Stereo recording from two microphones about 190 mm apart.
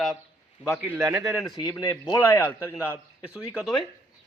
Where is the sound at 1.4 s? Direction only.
20° left (ahead or behind).